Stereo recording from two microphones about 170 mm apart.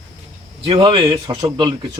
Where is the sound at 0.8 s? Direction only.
30° right (ahead or behind).